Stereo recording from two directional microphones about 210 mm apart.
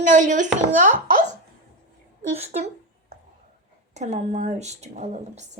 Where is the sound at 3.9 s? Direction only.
35° right (ahead or behind).